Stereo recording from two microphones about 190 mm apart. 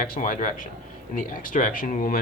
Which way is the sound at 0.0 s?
45° left (ahead or behind).